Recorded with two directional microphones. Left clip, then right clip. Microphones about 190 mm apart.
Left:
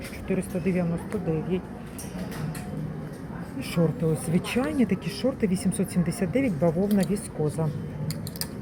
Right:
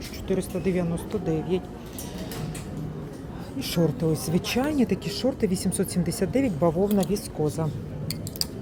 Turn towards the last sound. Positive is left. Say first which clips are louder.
# right 1 dB
turn(degrees=-10)  # may be behind; listen again after turning